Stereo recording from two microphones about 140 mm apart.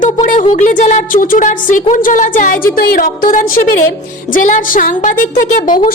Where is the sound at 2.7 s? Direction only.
80° left.